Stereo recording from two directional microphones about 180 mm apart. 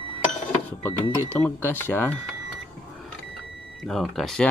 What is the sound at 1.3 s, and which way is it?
Speech, 10° left (ahead or behind).